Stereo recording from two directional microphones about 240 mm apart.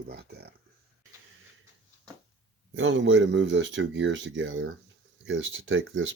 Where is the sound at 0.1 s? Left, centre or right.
Right.